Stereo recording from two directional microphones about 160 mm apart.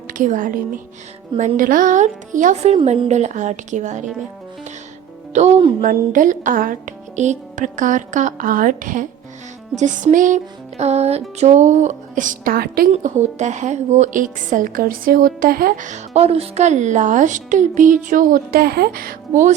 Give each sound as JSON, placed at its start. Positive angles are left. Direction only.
{"t": 0.1, "sound": "a woman's voice", "side_deg": -55}
{"t": 5.3, "sound": "a woman's voice", "side_deg": -45}
{"t": 5.8, "sound": "a woman's voice", "side_deg": -55}
{"t": 12.9, "sound": "a woman's voice", "side_deg": -45}